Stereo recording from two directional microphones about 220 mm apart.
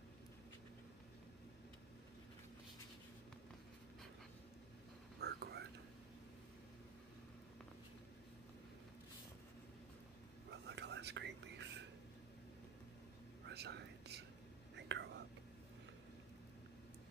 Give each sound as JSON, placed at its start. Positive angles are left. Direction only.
{"t": 5.2, "sound": "whispering", "side_deg": -50}
{"t": 10.5, "sound": "whispering", "side_deg": -50}
{"t": 13.5, "sound": "whispering", "side_deg": -50}